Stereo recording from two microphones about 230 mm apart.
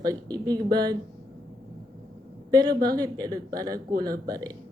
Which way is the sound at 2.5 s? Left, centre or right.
Centre.